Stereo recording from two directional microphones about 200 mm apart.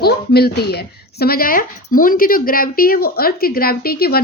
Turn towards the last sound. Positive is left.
turn(degrees=50)  # may be behind; listen again after turning